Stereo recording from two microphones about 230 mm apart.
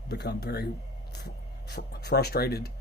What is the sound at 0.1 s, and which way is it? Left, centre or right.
Speech, left.